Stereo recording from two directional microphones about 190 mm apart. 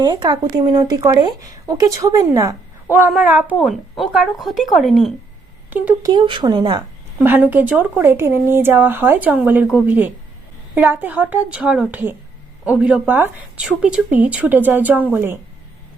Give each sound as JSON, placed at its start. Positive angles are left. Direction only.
{"t": 0.0, "sound": "speech", "side_deg": -20}
{"t": 2.9, "sound": "a woman's voice", "side_deg": -5}
{"t": 6.0, "sound": "speech", "side_deg": -25}
{"t": 7.2, "sound": "speech", "side_deg": -5}